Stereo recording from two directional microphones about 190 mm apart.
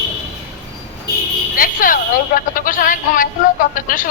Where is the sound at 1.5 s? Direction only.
45° left (ahead or behind).